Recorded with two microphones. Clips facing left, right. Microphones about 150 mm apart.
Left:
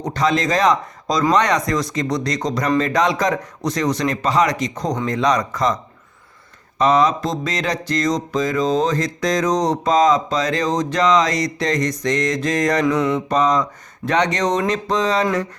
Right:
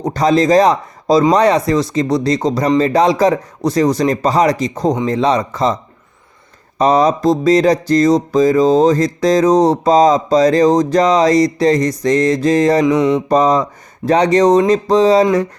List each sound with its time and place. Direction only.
0.0 s mantra: 35° right (ahead or behind)
6.7 s mantra: 35° right (ahead or behind); by 13.2 s 20° right (ahead or behind)
13.2 s mantra: 35° right (ahead or behind)